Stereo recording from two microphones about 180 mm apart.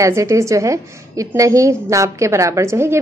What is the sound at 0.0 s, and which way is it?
A woman's voice, 15° right (ahead or behind).